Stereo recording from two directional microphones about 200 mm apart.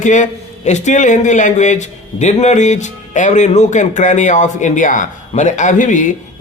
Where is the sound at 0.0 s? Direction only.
40° left (ahead or behind).